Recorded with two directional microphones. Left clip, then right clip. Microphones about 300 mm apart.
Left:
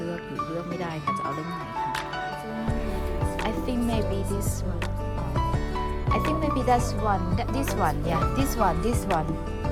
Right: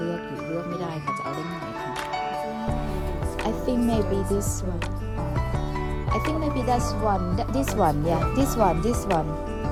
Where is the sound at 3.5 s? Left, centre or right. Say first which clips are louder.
Right 7 dB; centre.